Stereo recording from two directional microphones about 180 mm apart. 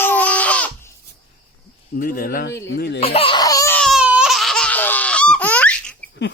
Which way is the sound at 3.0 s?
30° left (ahead or behind).